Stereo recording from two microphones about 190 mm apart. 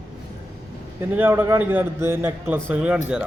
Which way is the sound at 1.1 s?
10° right (ahead or behind).